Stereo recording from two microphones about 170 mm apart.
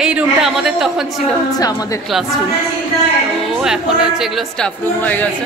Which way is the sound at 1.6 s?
20° left (ahead or behind).